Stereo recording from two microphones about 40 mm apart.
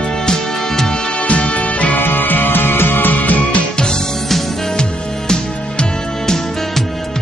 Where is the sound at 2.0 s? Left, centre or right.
Left.